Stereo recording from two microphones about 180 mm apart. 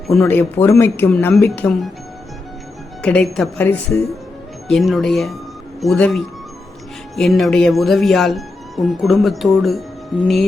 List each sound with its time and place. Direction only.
0.1 s speech: 5° left (ahead or behind)
1.1 s speech: 5° left (ahead or behind)
3.0 s speech: 5° left (ahead or behind)